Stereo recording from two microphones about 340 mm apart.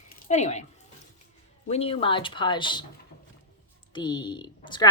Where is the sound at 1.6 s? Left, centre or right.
Centre.